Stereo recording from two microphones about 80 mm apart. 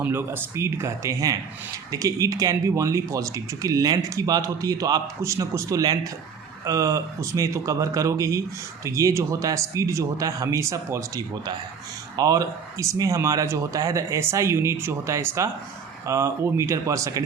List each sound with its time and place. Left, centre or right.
0.0 s speech: right
5.2 s speech: right